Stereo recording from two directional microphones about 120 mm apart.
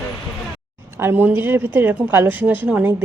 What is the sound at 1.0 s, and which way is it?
A woman's voice, 20° right (ahead or behind).